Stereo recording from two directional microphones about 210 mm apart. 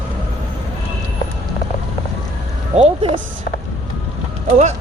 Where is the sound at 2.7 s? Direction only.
25° right (ahead or behind).